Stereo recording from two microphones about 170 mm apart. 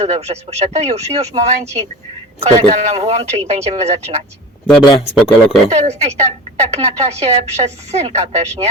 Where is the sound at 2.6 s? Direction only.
40° right (ahead or behind).